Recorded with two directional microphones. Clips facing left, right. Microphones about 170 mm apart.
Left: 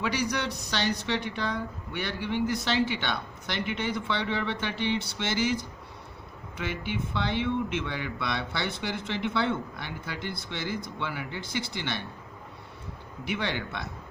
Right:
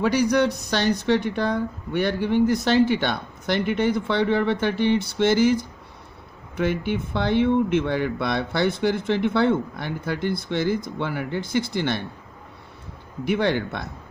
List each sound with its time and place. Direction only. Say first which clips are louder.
0.0 s a woman's voice: right 10 dB; 45° right (ahead or behind)
6.6 s a woman's voice: right 9 dB; 50° right (ahead or behind)
13.2 s a woman's voice: right 9 dB; 45° right (ahead or behind)